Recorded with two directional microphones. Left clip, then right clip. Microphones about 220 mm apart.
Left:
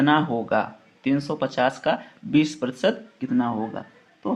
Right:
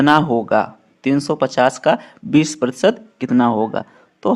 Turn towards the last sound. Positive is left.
turn(degrees=-55)  # may be behind; listen again after turning